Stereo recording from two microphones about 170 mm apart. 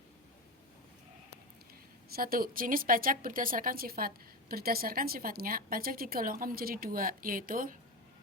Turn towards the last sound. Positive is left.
turn(degrees=-55)  # may be behind; listen again after turning